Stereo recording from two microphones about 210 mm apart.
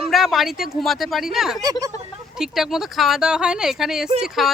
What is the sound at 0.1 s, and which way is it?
Speech, centre (ahead or behind).